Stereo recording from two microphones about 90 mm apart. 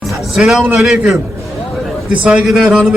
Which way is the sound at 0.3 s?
Centre (ahead or behind).